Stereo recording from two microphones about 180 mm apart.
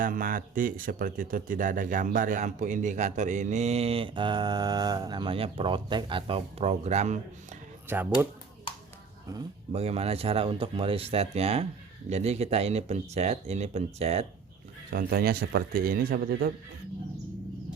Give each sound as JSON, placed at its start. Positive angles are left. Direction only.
{"t": 0.0, "sound": "speech", "side_deg": -50}
{"t": 7.9, "sound": "speech", "side_deg": -10}
{"t": 9.7, "sound": "speech", "side_deg": -35}
{"t": 14.9, "sound": "a man's voice", "side_deg": -55}